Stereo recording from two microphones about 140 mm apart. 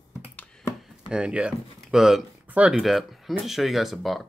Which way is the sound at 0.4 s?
5° left (ahead or behind).